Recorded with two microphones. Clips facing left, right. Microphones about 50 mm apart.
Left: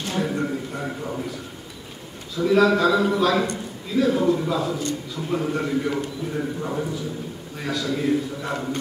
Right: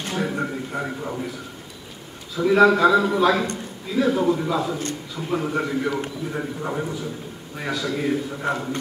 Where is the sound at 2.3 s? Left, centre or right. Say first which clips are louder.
Right 2 dB; centre.